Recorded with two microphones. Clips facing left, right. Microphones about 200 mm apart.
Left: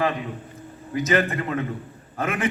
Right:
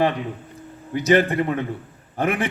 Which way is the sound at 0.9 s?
30° right (ahead or behind).